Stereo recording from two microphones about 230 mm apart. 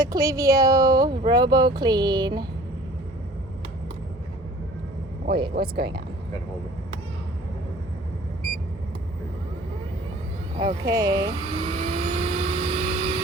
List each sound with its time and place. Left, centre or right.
0.0 s speech: centre
5.5 s speech: right
10.8 s speech: centre
11.3 s vehicle: right